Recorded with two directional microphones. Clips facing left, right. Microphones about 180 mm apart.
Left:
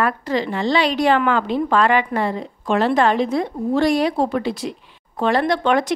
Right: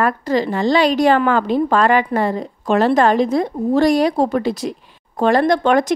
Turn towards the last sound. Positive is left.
turn(degrees=-45)  # may be behind; listen again after turning